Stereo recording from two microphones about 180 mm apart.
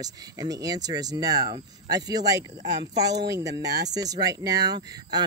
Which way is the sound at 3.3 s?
20° right (ahead or behind).